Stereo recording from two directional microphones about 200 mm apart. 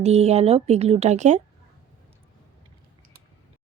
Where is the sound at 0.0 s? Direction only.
30° right (ahead or behind).